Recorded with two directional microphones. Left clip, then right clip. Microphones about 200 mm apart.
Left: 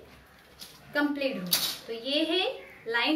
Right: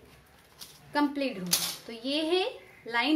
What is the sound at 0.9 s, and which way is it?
A woman's voice, 55° right (ahead or behind).